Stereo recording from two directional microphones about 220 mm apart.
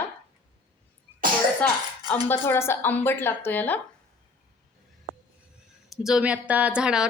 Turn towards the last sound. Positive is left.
turn(degrees=-5)  # may be behind; listen again after turning